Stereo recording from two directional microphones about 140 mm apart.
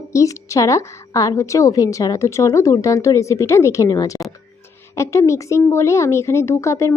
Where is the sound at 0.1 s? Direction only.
20° left (ahead or behind).